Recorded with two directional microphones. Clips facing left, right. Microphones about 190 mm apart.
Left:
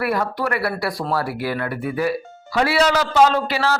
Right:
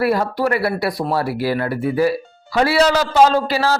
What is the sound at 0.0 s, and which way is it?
Speech, 30° right (ahead or behind).